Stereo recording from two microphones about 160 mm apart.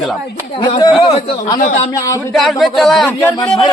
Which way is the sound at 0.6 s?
25° left (ahead or behind).